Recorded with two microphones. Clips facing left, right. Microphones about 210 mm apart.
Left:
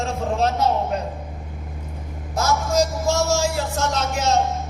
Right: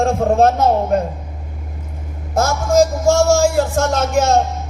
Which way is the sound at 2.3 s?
50° right (ahead or behind).